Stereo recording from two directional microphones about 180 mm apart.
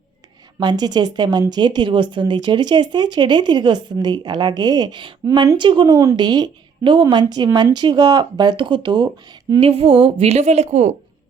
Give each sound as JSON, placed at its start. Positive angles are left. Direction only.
{"t": 0.6, "sound": "a woman's voice", "side_deg": -25}